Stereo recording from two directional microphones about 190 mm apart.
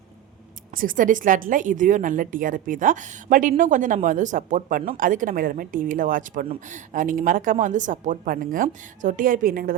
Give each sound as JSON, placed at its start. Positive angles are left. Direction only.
{"t": 0.7, "sound": "speech", "side_deg": -45}